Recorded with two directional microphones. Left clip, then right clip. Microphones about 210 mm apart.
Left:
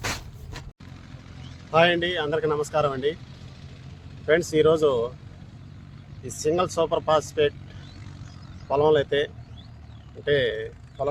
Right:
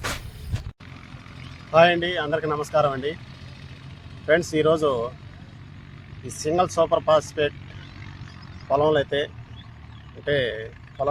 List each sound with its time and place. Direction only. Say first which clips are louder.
1.7 s speech: right 3 dB; 25° left (ahead or behind)
4.3 s speech: even; 25° left (ahead or behind)
6.2 s speech: right 1 dB; 25° left (ahead or behind)
8.7 s speech: even; 25° left (ahead or behind)